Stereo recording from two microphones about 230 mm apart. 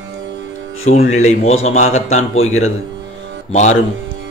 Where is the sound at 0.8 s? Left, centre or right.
Left.